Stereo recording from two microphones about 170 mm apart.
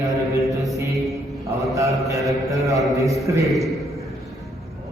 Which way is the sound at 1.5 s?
20° right (ahead or behind).